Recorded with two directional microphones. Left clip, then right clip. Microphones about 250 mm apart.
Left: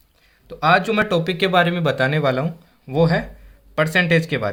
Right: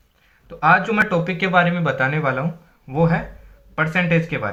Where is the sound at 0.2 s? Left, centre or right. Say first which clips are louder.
Right 1 dB; left.